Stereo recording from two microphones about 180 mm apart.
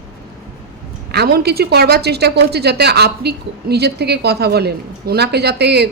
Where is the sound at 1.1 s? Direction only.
60° right (ahead or behind).